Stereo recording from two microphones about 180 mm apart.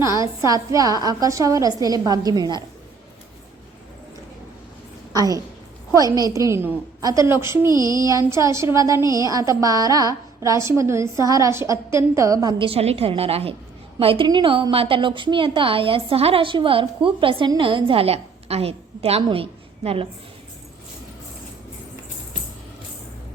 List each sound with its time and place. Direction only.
0.0 s a woman's voice: 15° right (ahead or behind)
5.1 s a woman's voice: 20° right (ahead or behind)
6.3 s a sound: 15° right (ahead or behind)
9.1 s a woman's voice: 20° right (ahead or behind)